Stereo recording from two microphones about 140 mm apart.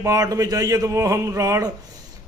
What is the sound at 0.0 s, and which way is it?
A man's voice, 25° right (ahead or behind).